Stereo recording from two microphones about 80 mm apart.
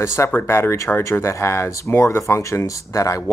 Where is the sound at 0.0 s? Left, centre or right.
Left.